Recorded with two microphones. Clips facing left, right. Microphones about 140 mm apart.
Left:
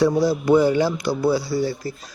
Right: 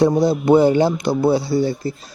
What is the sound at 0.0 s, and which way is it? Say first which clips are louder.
Speech: right 3 dB; 25° right (ahead or behind).